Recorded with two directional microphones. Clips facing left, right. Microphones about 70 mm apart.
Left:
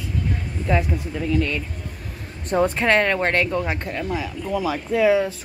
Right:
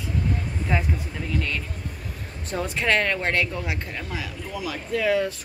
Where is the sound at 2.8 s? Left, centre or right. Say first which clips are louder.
Left 4 dB; left.